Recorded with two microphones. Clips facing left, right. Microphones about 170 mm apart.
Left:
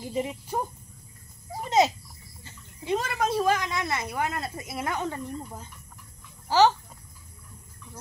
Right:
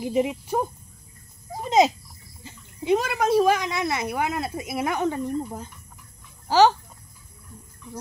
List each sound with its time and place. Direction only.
0.0 s speech: 15° right (ahead or behind)